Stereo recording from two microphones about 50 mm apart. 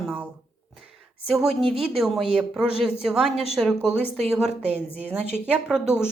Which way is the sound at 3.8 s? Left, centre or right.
Left.